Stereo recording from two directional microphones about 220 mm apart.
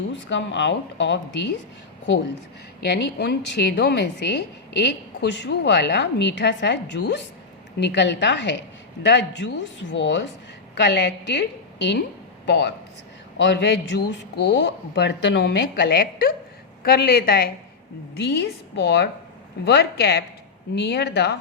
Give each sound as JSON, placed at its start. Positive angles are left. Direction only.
{"t": 0.1, "sound": "speech", "side_deg": 55}
{"t": 2.8, "sound": "a woman's voice", "side_deg": 50}